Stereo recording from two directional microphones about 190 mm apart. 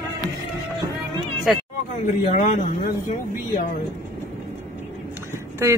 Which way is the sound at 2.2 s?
40° left (ahead or behind).